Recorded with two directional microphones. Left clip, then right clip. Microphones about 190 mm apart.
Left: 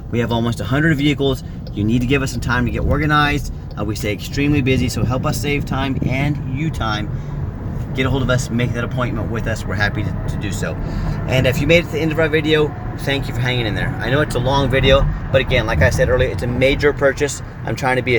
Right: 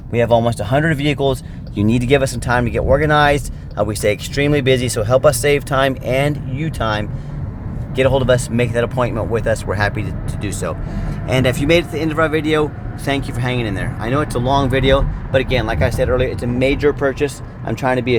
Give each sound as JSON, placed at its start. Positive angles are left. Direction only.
{"t": 0.1, "sound": "speech", "side_deg": -45}